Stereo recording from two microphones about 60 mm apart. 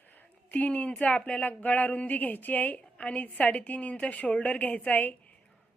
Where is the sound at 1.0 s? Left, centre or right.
Left.